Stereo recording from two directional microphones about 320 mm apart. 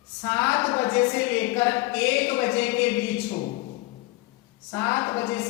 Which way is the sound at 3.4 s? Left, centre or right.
Left.